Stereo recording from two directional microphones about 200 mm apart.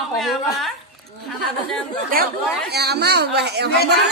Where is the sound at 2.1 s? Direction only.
45° right (ahead or behind).